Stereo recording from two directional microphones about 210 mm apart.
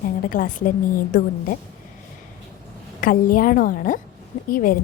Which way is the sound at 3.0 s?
45° left (ahead or behind).